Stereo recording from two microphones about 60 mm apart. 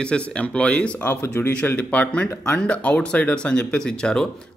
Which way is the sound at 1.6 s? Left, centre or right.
Left.